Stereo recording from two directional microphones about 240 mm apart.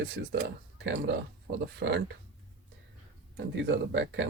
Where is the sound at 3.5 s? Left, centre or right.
Right.